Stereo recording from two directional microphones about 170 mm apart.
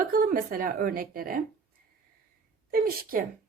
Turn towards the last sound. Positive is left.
turn(degrees=-60)  # may be behind; listen again after turning